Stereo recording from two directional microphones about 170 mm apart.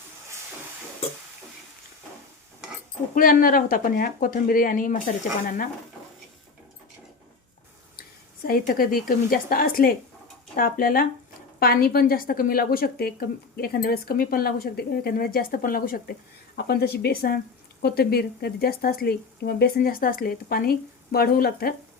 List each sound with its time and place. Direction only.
3.2 s a woman's voice: 55° left (ahead or behind)
8.4 s a woman's voice: 60° left (ahead or behind)
16.6 s a woman's voice: 70° left (ahead or behind)